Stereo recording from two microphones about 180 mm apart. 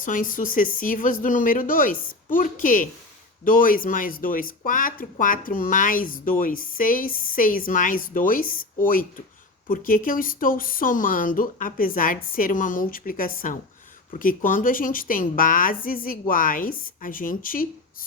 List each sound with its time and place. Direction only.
0.0 s speech: 45° left (ahead or behind)